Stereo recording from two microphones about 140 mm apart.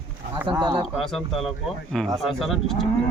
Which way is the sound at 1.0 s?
Centre (ahead or behind).